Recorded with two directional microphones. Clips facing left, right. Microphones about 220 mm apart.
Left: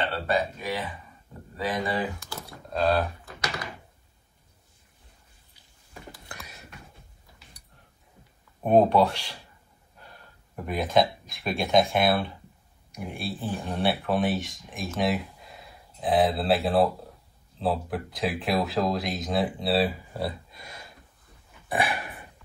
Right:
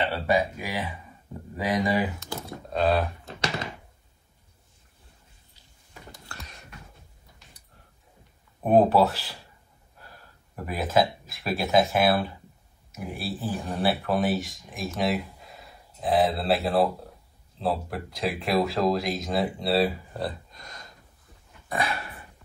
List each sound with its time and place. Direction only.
0.0 s speech: 10° right (ahead or behind)
2.7 s speech: centre (ahead or behind)
3.3 s speech: 25° right (ahead or behind)
6.2 s a sound: 10° left (ahead or behind)
8.6 s speech: 5° right (ahead or behind)
21.6 s dog: 15° left (ahead or behind)